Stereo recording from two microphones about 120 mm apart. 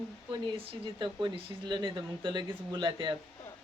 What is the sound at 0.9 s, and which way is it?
A woman's voice, 40° right (ahead or behind).